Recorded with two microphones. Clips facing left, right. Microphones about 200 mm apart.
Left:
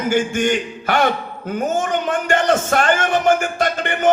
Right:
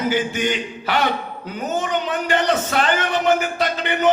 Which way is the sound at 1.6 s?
50° left (ahead or behind).